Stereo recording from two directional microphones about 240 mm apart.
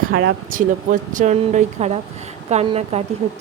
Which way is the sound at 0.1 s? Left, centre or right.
Right.